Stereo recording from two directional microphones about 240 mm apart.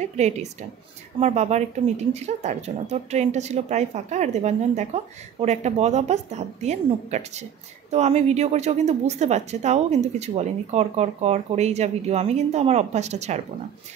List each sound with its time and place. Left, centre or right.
0.2 s a woman's voice: right